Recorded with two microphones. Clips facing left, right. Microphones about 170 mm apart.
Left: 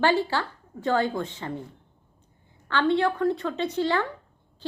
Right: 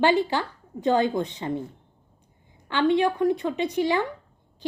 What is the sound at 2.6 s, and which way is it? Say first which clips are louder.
A woman's voice: right 2 dB; 15° right (ahead or behind).